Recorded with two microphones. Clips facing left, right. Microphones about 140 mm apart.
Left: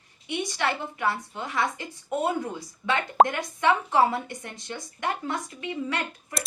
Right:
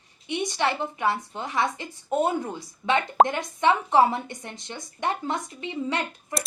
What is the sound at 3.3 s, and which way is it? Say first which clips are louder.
A woman's voice: right 1 dB; 25° right (ahead or behind).